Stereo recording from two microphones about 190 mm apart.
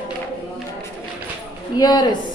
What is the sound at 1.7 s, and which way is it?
Speech, 20° left (ahead or behind).